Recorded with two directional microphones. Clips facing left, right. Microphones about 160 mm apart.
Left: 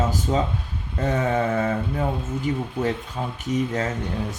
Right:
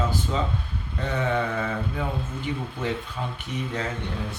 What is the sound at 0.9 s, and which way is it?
Mantra, 40° left (ahead or behind).